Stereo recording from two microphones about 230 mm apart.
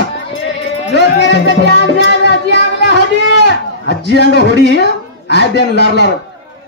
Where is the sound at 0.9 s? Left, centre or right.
Left.